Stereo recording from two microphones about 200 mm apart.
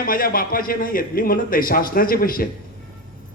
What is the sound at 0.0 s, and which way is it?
A man's voice, 45° left (ahead or behind).